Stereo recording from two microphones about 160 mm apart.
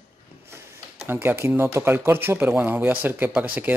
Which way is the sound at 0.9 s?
15° right (ahead or behind).